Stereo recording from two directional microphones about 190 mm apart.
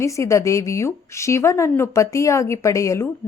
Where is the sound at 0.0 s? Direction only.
15° left (ahead or behind).